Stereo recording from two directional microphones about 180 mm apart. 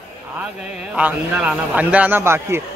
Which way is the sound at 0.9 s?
5° right (ahead or behind).